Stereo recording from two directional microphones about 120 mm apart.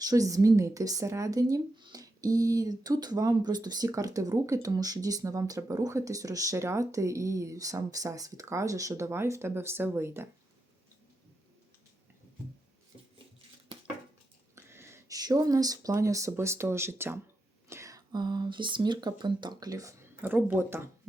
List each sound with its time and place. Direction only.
0.0 s speech: 30° right (ahead or behind)
14.5 s speech: 20° right (ahead or behind)
20.2 s speech: 15° right (ahead or behind)